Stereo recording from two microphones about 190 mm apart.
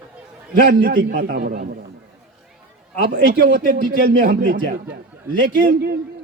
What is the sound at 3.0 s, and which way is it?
A man's voice, 50° right (ahead or behind).